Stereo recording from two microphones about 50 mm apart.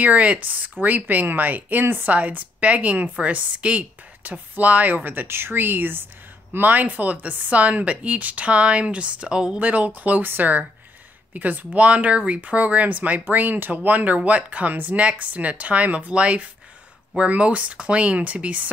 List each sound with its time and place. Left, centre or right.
0.0 s speech: right